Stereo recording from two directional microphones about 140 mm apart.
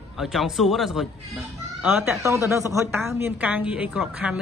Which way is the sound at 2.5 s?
20° right (ahead or behind).